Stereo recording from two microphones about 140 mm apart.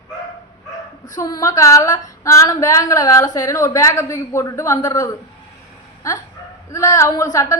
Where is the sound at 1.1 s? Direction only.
25° left (ahead or behind).